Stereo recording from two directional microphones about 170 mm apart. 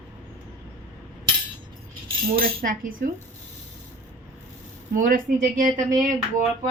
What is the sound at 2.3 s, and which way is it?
Speech, 60° right (ahead or behind).